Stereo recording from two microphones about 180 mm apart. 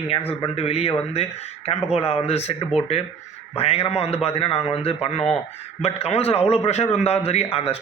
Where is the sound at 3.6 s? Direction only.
35° left (ahead or behind).